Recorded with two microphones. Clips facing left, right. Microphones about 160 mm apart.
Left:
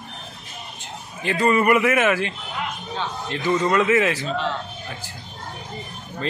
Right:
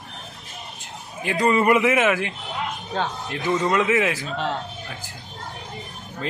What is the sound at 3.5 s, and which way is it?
Speech, 20° right (ahead or behind).